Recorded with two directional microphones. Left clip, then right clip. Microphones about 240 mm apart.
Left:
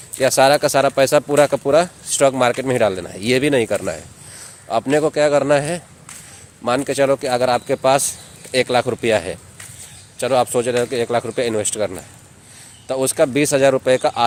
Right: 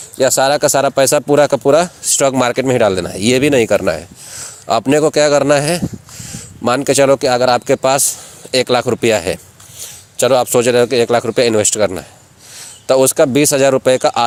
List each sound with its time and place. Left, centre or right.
0.2 s speech: right